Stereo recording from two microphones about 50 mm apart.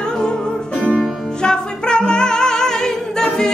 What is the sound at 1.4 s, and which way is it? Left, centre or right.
Music, centre.